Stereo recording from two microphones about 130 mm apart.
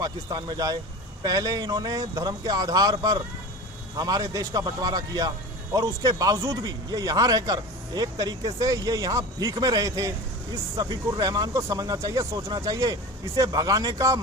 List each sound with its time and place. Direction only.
0.0 s speech: 30° right (ahead or behind)
3.9 s speech: 30° right (ahead or behind)